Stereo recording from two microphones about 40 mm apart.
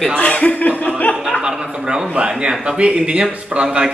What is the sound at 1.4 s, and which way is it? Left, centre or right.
A man's voice, centre.